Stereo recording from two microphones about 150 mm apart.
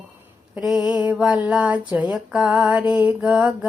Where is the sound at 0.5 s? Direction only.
5° right (ahead or behind).